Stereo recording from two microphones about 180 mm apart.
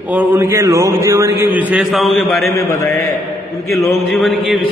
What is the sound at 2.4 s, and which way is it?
A man's voice, 15° left (ahead or behind).